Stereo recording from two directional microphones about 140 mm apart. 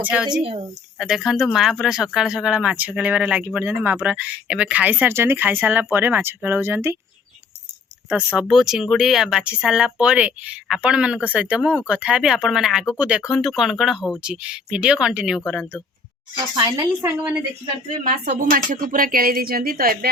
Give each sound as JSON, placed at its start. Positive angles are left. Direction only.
{"t": 0.0, "sound": "speech", "side_deg": -10}
{"t": 8.4, "sound": "speech", "side_deg": 0}
{"t": 16.6, "sound": "a woman's voice", "side_deg": -20}
{"t": 18.3, "sound": "a woman's voice", "side_deg": -80}